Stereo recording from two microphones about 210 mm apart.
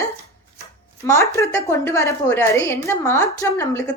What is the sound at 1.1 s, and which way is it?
A woman's voice, 15° left (ahead or behind).